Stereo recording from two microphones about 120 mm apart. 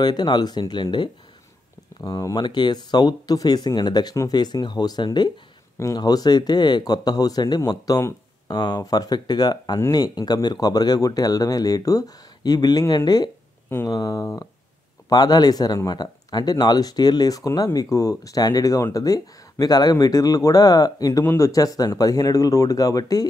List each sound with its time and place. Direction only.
0.0 s speech: 35° left (ahead or behind)